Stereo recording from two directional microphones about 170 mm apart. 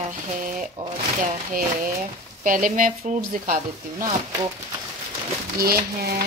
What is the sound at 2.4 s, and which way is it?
Speech, 50° right (ahead or behind).